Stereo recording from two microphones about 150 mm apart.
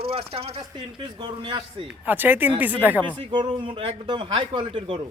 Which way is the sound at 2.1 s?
15° right (ahead or behind).